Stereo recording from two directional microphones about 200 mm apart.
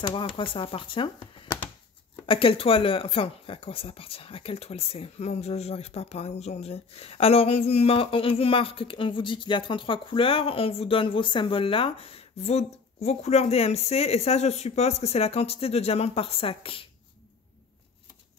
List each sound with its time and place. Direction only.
0.0 s speech: 25° left (ahead or behind)